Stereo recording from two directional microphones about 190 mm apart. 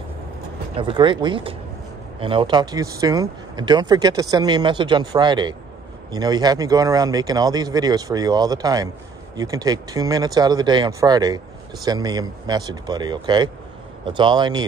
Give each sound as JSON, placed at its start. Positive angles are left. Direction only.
{"t": 0.7, "sound": "speech", "side_deg": -25}